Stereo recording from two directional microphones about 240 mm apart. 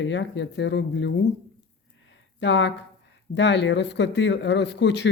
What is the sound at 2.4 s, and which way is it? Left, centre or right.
Speech, left.